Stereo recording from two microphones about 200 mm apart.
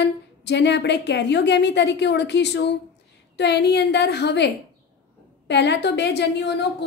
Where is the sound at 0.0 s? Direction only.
60° left (ahead or behind).